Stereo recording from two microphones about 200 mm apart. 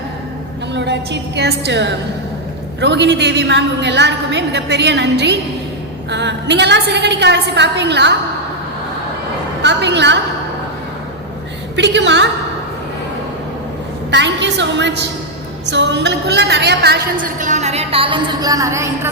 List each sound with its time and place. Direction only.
0.7 s a woman's voice: 60° right (ahead or behind)
9.6 s a woman's voice: 60° right (ahead or behind)
11.8 s a woman's voice: 60° right (ahead or behind)
14.1 s a woman's voice: 60° right (ahead or behind); by 18.9 s 15° right (ahead or behind)